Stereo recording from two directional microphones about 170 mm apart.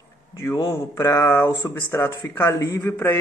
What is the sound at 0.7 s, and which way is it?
Speech, 15° left (ahead or behind).